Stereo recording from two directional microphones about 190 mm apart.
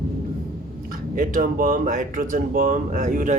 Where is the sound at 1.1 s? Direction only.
45° right (ahead or behind).